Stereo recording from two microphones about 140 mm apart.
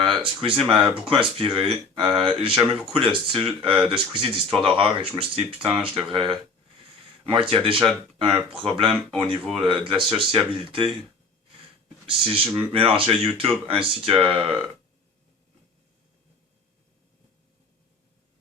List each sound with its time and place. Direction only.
0.0 s speech: 35° right (ahead or behind)
12.0 s speech: 40° right (ahead or behind)